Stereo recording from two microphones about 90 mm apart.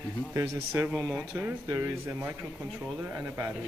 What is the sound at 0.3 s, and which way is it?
A man's voice, 35° right (ahead or behind).